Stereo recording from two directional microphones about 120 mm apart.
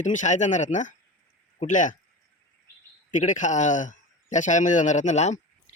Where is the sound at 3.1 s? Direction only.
90° left.